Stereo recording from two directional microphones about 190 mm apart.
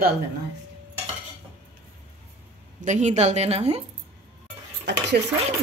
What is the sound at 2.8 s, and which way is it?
A woman's voice, 40° right (ahead or behind).